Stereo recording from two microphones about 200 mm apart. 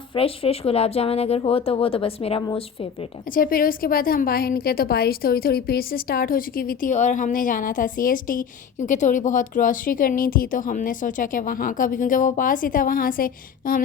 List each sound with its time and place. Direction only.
0.1 s speech: 30° left (ahead or behind)
3.3 s a woman's voice: 45° left (ahead or behind)